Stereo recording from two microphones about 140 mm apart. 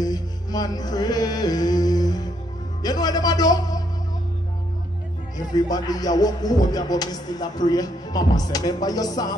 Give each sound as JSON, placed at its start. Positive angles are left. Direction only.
{"t": 0.0, "sound": "music", "side_deg": 30}
{"t": 5.5, "sound": "music", "side_deg": 30}